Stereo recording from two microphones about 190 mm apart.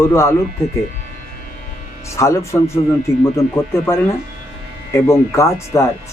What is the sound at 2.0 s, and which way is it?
Speech, 15° left (ahead or behind).